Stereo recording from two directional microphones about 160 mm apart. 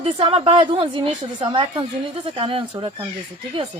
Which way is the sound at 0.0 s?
35° right (ahead or behind).